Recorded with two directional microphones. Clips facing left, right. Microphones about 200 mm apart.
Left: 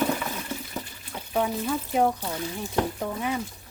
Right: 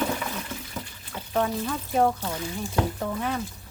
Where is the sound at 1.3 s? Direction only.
10° left (ahead or behind).